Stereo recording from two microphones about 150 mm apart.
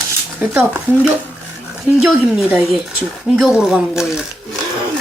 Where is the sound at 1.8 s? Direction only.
5° right (ahead or behind).